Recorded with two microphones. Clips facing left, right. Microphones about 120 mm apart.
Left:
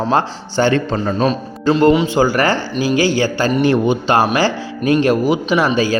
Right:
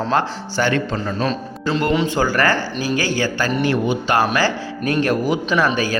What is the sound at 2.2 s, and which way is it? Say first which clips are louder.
A man's voice: left 3 dB; 15° left (ahead or behind).